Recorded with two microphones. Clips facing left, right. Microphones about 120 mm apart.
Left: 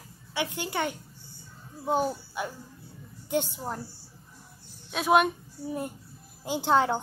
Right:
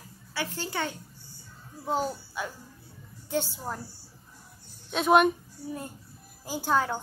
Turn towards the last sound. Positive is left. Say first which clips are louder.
# left 3 dB
turn(degrees=20)  # may be behind; listen again after turning